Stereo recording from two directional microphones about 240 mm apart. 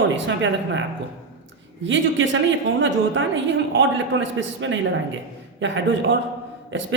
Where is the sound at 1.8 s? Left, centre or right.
Right.